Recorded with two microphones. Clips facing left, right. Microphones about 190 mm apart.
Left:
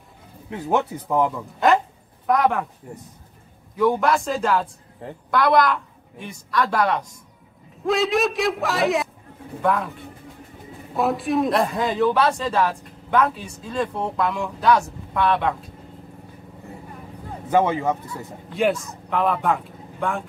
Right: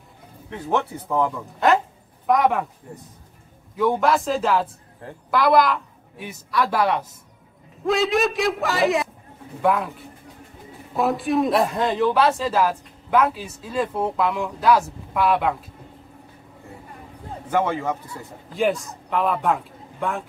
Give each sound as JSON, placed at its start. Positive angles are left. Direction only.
{"t": 0.7, "sound": "speech", "side_deg": 10}
{"t": 2.2, "sound": "speech", "side_deg": 0}
{"t": 3.7, "sound": "speech", "side_deg": 0}
{"t": 11.0, "sound": "speech", "side_deg": 0}
{"t": 17.5, "sound": "speech", "side_deg": 20}
{"t": 18.6, "sound": "a man's voice", "side_deg": 0}